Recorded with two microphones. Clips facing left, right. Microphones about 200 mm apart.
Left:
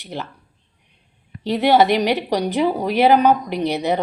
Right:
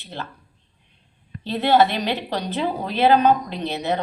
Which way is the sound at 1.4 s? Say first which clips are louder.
Left 2 dB; 15° left (ahead or behind).